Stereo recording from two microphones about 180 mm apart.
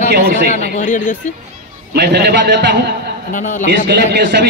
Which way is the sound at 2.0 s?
65° right (ahead or behind).